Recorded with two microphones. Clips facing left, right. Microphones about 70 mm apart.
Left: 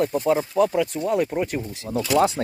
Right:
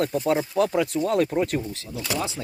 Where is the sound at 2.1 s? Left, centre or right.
Left.